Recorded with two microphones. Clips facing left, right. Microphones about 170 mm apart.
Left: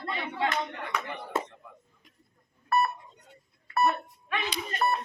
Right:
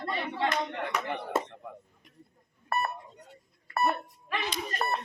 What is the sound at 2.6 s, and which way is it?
Beep, 45° right (ahead or behind).